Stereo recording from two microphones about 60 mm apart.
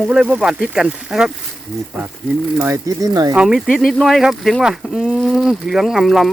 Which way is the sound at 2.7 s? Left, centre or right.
Right.